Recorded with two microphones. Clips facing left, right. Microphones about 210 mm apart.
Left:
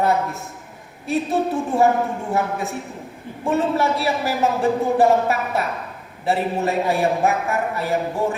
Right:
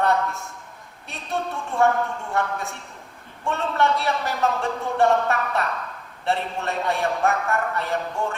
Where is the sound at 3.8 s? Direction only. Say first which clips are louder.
Left 2 dB; 5° left (ahead or behind).